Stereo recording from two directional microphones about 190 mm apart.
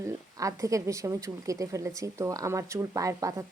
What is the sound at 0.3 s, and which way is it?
A woman's voice, 15° right (ahead or behind).